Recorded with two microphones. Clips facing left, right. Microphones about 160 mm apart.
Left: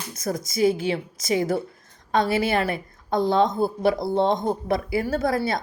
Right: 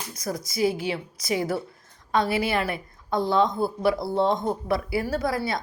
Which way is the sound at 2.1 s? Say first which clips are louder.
Left 2 dB; 25° left (ahead or behind).